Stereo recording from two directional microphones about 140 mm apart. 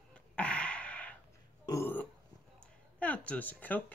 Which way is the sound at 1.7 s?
15° left (ahead or behind).